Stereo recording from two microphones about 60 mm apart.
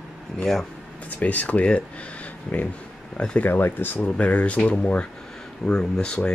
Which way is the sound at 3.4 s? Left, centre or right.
Left.